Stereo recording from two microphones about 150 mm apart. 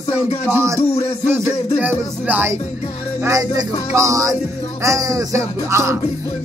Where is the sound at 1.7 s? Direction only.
10° right (ahead or behind).